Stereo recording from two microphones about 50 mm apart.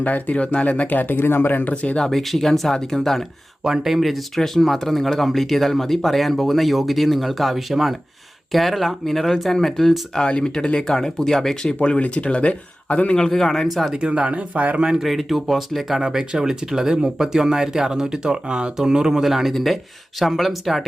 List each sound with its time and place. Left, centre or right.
0.0 s speech: left
1.7 s speech: left
2.0 s speech: centre
3.6 s speech: centre
10.2 s speech: centre
11.8 s speech: left
13.1 s speech: centre
13.9 s speech: right
14.8 s speech: centre
15.0 s speech: centre
16.0 s speech: centre